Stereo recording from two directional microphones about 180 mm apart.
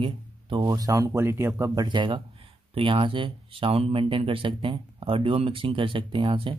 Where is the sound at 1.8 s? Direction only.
25° right (ahead or behind).